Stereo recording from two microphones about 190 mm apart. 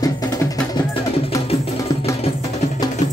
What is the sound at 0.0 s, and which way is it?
Music, 20° left (ahead or behind).